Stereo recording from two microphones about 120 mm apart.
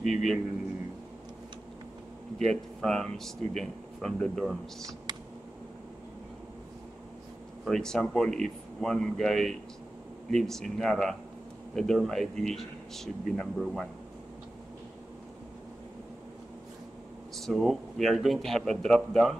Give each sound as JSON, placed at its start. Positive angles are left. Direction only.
{"t": 0.0, "sound": "a man's voice", "side_deg": 0}
{"t": 2.8, "sound": "a man's voice", "side_deg": 5}
{"t": 5.1, "sound": "a sound", "side_deg": -35}
{"t": 7.6, "sound": "a man's voice", "side_deg": 5}
{"t": 17.4, "sound": "a man's voice", "side_deg": 0}